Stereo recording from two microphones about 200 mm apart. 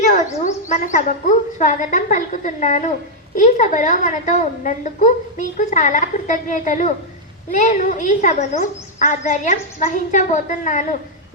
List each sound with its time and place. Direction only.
0.3 s a woman's voice: 35° left (ahead or behind)